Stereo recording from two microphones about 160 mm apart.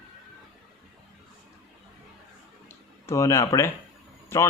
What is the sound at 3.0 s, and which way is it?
Speech, 20° left (ahead or behind).